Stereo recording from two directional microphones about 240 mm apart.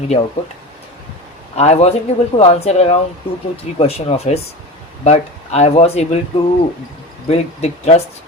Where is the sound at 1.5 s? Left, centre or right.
Left.